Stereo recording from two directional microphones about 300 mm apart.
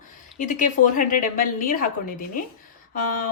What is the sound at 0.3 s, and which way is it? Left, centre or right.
A woman's voice, left.